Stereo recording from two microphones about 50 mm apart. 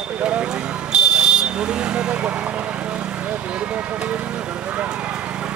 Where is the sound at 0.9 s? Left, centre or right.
Centre.